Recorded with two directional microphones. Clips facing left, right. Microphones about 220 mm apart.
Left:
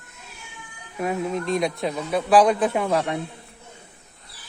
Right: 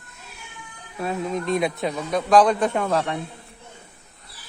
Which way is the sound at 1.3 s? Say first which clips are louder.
Right 1 dB; centre (ahead or behind).